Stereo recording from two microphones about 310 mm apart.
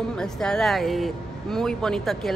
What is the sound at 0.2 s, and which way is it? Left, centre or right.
Speech, centre.